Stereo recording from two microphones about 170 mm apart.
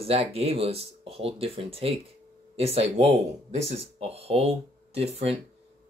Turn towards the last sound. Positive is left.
turn(degrees=-35)  # may be behind; listen again after turning